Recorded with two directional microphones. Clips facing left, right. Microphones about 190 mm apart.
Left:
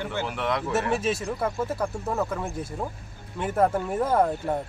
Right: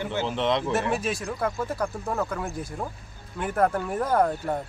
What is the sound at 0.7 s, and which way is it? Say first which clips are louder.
Speech: left 1 dB; centre (ahead or behind).